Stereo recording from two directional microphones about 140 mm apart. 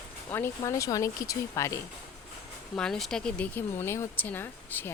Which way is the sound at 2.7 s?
5° left (ahead or behind).